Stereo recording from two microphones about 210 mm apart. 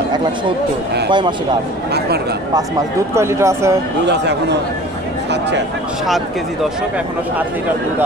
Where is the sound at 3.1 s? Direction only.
15° right (ahead or behind).